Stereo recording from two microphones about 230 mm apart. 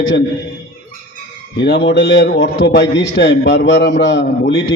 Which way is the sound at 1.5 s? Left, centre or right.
Left.